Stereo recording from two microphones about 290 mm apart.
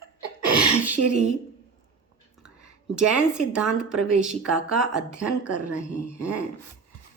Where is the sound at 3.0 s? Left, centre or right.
Centre.